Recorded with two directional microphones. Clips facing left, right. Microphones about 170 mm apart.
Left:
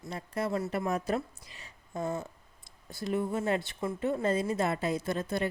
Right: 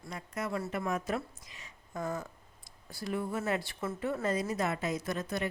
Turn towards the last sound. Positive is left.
turn(degrees=30)  # may be behind; listen again after turning